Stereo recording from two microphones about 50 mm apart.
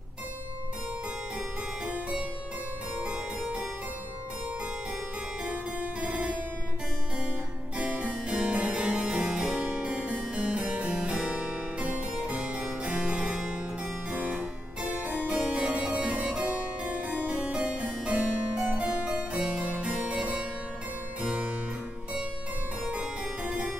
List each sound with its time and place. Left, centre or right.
5.4 s harpsichord: right
7.7 s music: right
8.3 s harpsichord: right
8.8 s music: centre
10.3 s harpsichord: right
14.3 s music: centre
14.9 s harpsichord: right
15.2 s music: right
15.9 s harpsichord: right
21.2 s music: right
22.8 s music: centre